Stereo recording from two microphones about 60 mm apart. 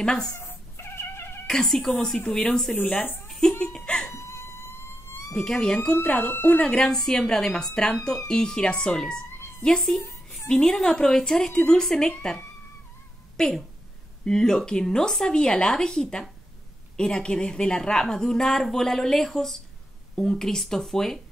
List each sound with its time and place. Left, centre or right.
0.0 s a woman's voice: centre
0.4 s cat: left
1.5 s a woman's voice: centre
2.7 s speech: left
3.3 s laughter: centre
3.7 s a sound: centre
4.1 s a sound: left
5.3 s a woman's voice: centre
6.3 s speech: left
6.6 s a woman's voice: centre
13.4 s a woman's voice: centre